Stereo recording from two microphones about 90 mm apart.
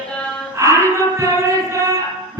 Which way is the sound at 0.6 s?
35° right (ahead or behind).